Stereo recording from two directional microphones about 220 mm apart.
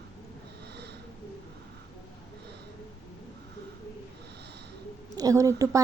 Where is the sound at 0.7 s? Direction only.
50° right (ahead or behind).